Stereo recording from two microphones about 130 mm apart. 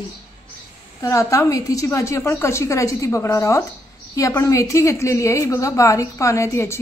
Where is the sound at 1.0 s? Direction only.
25° left (ahead or behind).